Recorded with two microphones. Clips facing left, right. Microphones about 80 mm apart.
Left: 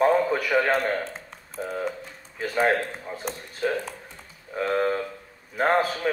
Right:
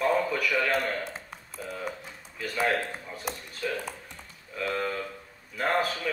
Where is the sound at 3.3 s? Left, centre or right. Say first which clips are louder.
Even; centre.